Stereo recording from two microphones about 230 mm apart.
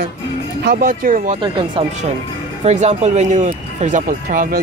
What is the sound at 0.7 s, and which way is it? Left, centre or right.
Speech, right.